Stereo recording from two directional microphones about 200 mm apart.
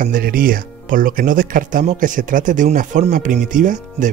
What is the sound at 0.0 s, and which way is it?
Speech, 45° right (ahead or behind).